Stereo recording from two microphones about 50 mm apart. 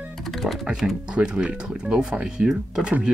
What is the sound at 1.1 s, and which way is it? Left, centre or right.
Speech, centre.